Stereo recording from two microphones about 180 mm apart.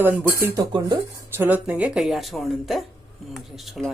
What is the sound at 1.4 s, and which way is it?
Speech, 10° right (ahead or behind).